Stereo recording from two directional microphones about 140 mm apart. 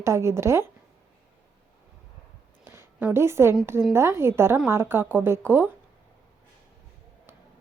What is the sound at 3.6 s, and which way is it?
Speech, 20° right (ahead or behind).